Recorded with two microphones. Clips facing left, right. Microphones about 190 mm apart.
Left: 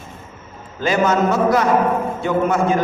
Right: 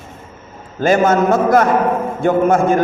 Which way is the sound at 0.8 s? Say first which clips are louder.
Right 4 dB; 50° right (ahead or behind).